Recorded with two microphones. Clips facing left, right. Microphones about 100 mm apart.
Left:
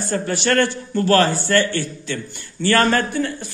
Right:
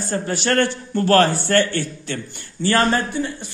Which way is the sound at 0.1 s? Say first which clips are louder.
Left 1 dB; 40° right (ahead or behind).